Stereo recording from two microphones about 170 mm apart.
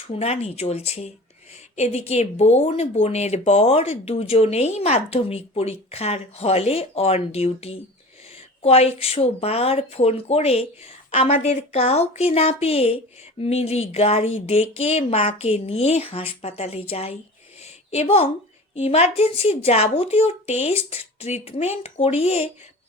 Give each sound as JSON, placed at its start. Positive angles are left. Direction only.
{"t": 0.1, "sound": "speech", "side_deg": 40}
{"t": 17.6, "sound": "a sound", "side_deg": 40}
{"t": 18.7, "sound": "speech", "side_deg": 40}